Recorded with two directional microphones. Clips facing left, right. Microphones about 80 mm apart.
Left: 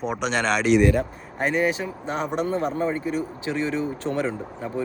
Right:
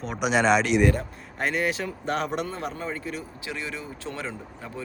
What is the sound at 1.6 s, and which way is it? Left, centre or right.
Speech, centre.